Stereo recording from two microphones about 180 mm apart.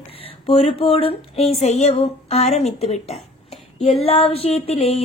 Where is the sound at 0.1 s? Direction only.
30° left (ahead or behind).